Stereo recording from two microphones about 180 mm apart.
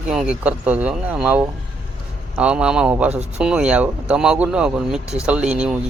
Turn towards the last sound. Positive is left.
turn(degrees=-5)  # may be behind; listen again after turning